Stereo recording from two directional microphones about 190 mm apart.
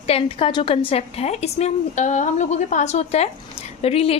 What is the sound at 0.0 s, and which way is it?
A woman's voice, 30° left (ahead or behind).